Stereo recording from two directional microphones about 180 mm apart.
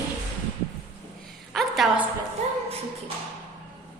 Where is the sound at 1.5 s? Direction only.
Centre (ahead or behind).